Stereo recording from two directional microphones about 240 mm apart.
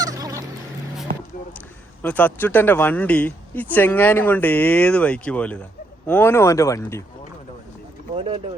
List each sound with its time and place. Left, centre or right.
0.0 s fowl: centre
2.0 s speech: centre
8.1 s speech: right